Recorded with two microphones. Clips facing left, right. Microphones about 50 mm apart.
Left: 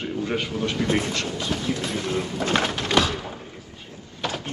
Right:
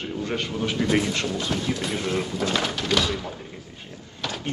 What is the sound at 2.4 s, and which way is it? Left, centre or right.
Speech, left.